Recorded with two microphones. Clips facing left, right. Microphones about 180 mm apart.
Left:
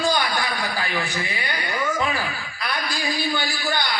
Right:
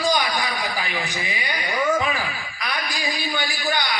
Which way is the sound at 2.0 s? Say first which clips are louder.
Even; 15° right (ahead or behind).